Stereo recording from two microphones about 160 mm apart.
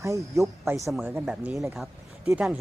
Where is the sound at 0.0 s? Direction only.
20° right (ahead or behind).